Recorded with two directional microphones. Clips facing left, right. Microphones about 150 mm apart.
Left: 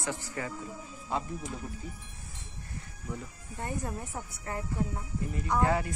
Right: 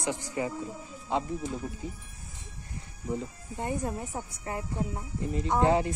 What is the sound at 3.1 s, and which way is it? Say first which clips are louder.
Speech: right 7 dB; 20° right (ahead or behind).